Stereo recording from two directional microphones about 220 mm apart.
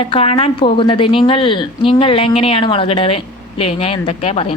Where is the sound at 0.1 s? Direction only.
25° left (ahead or behind).